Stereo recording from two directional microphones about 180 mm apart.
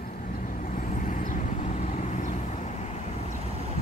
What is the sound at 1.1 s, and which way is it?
Vehicle, 45° left (ahead or behind).